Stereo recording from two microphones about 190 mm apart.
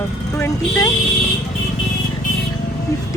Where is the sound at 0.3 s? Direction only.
15° left (ahead or behind).